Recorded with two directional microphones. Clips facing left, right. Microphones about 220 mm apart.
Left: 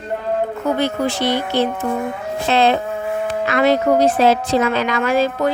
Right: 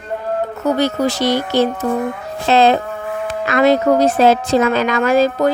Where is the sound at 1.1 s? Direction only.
40° right (ahead or behind).